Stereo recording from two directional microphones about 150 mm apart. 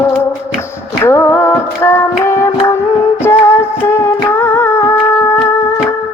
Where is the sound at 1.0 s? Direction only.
15° left (ahead or behind).